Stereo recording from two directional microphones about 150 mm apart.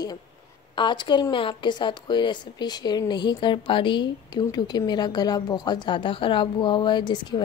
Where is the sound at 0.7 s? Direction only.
30° left (ahead or behind).